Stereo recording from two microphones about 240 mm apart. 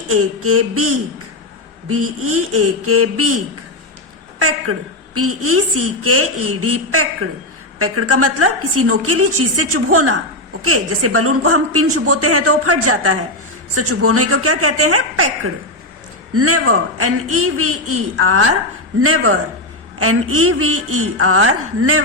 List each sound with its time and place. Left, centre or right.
0.1 s a woman's voice: right
1.9 s a woman's voice: right